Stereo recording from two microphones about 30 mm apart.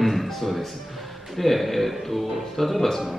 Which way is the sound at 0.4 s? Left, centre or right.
Centre.